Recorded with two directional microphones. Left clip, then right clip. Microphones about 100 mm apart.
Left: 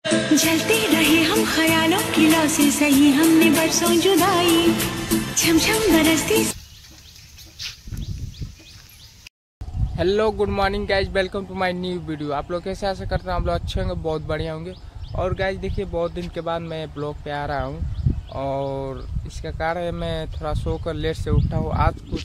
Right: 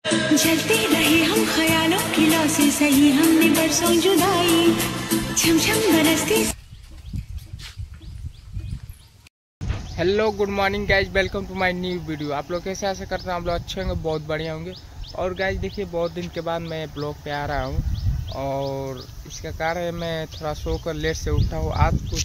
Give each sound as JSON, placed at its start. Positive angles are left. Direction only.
{"t": 0.0, "sound": "music", "side_deg": 0}
{"t": 9.9, "sound": "speech", "side_deg": 15}
{"t": 16.2, "sound": "music", "side_deg": 5}
{"t": 18.3, "sound": "speech", "side_deg": 15}
{"t": 19.4, "sound": "music", "side_deg": 5}